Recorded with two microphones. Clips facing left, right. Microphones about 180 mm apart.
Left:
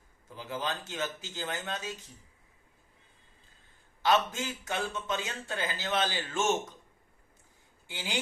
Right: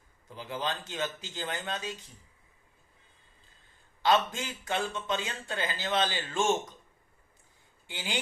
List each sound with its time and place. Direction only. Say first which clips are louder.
0.3 s speech: right 1 dB; 20° right (ahead or behind)
4.0 s speech: right 1 dB; 20° right (ahead or behind)
7.9 s speech: even; 20° right (ahead or behind)